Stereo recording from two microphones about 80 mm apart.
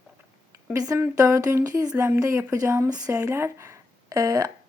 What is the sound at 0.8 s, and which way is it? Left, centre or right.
Speech, right.